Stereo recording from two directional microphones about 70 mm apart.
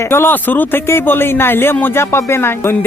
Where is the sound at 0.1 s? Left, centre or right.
Left.